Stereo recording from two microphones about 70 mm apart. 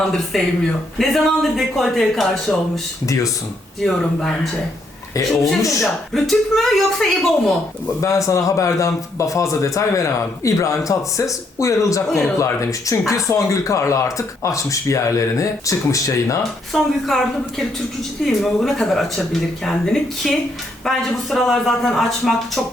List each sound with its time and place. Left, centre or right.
0.3 s speech: centre
3.8 s speech: centre
5.3 s speech: centre
8.0 s a man's voice: left
16.4 s speech: centre
18.3 s speech: centre